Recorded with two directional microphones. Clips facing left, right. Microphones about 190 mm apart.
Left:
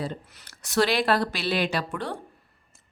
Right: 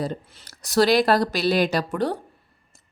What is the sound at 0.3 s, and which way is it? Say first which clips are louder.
A woman's voice: right 2 dB; 30° right (ahead or behind).